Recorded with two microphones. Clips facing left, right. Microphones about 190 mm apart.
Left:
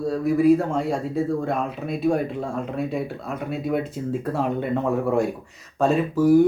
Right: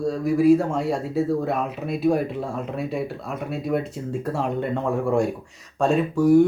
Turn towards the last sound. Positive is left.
turn(degrees=0)  # may be behind; listen again after turning